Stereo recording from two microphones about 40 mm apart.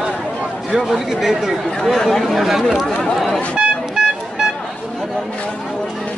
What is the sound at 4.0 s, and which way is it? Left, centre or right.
Music, centre.